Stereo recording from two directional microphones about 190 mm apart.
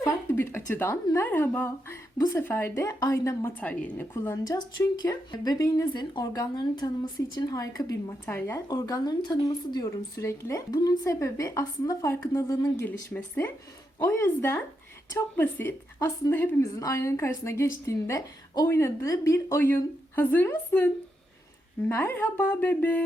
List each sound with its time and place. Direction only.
0.0 s a woman's voice: 10° left (ahead or behind)